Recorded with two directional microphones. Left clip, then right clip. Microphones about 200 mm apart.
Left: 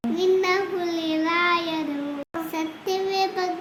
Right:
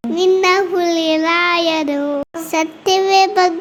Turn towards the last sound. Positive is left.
turn(degrees=-40)  # may be behind; listen again after turning